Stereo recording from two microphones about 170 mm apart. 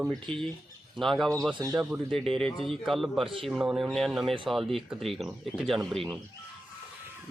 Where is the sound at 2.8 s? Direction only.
Centre (ahead or behind).